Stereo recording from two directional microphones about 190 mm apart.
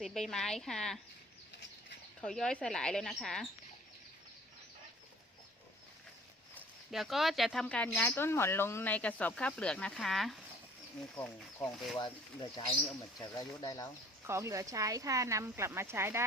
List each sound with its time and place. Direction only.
0.0 s speech: centre (ahead or behind)
2.2 s speech: 5° left (ahead or behind)
6.5 s speech: 5° left (ahead or behind)
11.9 s speech: 20° left (ahead or behind)
14.3 s speech: 15° right (ahead or behind)